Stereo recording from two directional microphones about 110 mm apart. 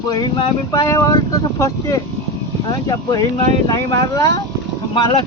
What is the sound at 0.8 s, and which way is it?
Speech, 30° left (ahead or behind).